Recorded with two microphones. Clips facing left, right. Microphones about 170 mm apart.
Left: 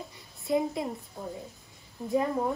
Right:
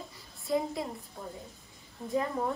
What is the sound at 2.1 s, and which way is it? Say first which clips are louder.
Speech: left 4 dB; 10° left (ahead or behind).